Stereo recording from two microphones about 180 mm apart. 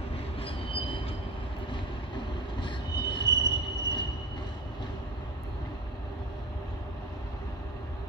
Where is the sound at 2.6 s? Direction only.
25° left (ahead or behind).